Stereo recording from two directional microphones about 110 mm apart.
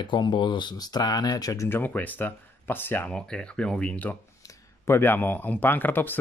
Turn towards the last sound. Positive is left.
turn(degrees=15)  # may be behind; listen again after turning